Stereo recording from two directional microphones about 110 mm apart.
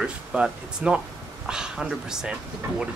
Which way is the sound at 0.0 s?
10° right (ahead or behind).